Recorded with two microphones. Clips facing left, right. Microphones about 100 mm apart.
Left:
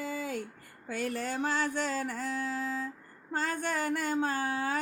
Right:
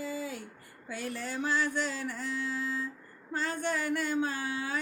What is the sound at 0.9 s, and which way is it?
Music, 45° left (ahead or behind).